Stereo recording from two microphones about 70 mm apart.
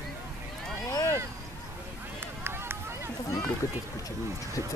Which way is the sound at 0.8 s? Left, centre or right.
Left.